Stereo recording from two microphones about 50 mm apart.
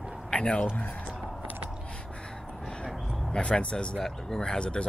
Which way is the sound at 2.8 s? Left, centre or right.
Centre.